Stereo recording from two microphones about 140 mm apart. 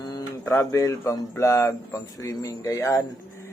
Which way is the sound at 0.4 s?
20° left (ahead or behind).